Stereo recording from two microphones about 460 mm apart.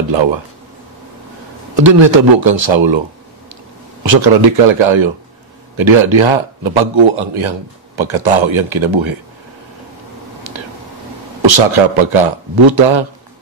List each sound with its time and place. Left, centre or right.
1.8 s a man's voice: right
4.0 s a man's voice: right
10.4 s whispering: right
11.4 s speech: right